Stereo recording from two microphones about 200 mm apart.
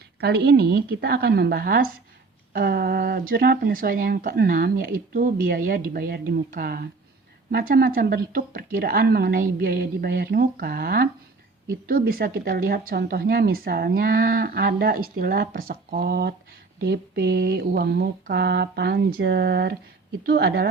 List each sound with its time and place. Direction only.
0.2 s speech: 55° right (ahead or behind)
16.8 s a sound: 55° right (ahead or behind)
20.2 s speech: 50° right (ahead or behind)